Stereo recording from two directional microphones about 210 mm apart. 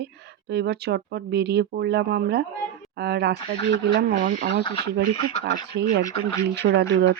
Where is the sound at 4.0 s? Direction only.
40° right (ahead or behind).